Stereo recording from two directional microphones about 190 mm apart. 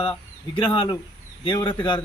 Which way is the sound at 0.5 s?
25° left (ahead or behind).